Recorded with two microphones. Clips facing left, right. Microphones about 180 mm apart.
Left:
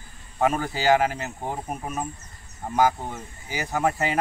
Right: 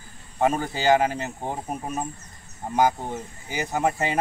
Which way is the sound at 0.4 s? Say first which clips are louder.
Even; 20° right (ahead or behind).